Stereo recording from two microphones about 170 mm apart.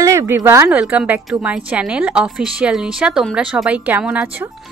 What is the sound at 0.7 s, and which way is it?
A woman's voice, 5° right (ahead or behind).